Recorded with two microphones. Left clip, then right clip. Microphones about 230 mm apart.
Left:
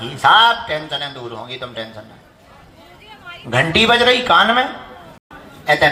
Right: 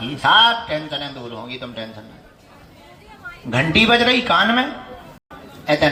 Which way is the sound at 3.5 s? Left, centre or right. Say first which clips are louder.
Left 2 dB; left.